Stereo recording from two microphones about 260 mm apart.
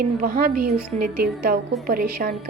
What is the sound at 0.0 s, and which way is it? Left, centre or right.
A woman's voice, right.